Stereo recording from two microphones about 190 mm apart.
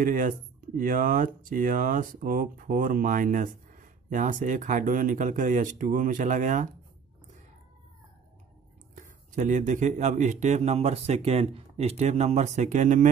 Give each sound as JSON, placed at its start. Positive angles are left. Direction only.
{"t": 0.0, "sound": "speech", "side_deg": -45}
{"t": 9.0, "sound": "speech", "side_deg": -40}